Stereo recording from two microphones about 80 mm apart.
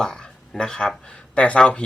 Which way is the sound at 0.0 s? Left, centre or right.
Centre.